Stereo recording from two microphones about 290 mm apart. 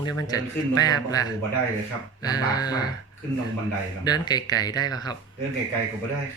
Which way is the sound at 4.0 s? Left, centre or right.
Centre.